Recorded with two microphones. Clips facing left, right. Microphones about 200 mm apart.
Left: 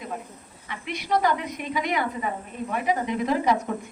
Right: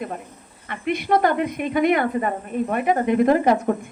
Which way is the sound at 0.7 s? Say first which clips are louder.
Right 6 dB; 55° right (ahead or behind).